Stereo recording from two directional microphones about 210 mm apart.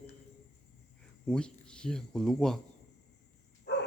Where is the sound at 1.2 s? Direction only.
5° left (ahead or behind).